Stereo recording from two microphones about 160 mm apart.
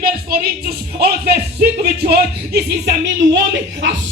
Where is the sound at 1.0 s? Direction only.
90° right.